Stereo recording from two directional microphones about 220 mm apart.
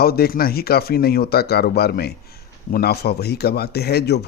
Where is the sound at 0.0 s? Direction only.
45° left (ahead or behind).